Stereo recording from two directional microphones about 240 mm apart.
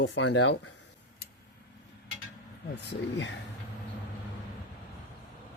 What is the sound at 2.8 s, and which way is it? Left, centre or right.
Speech, left.